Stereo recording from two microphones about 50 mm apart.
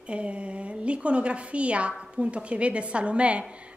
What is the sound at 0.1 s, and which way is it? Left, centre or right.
A woman's voice, right.